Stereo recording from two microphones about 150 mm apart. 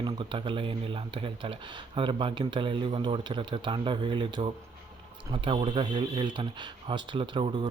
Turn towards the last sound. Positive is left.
turn(degrees=-30)  # may be behind; listen again after turning